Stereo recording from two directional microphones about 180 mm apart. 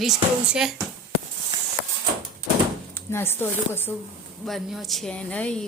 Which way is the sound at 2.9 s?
15° left (ahead or behind).